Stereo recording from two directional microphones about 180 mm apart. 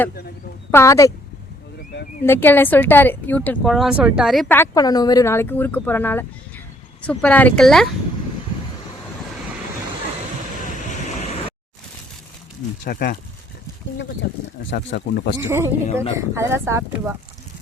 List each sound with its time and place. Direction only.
0.7 s speech: 15° left (ahead or behind)
2.2 s speech: 10° left (ahead or behind)
4.4 s speech: 10° left (ahead or behind)
12.8 s speech: 60° left (ahead or behind)
14.7 s speech: 75° left (ahead or behind)
15.4 s speech: 15° right (ahead or behind)